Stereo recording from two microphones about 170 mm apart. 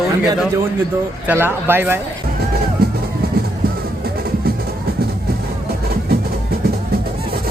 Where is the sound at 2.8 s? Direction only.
65° right (ahead or behind).